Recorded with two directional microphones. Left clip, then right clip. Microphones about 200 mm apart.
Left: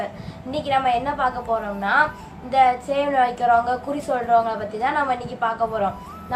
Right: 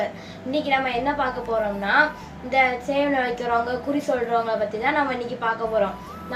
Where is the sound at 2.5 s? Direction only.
20° left (ahead or behind).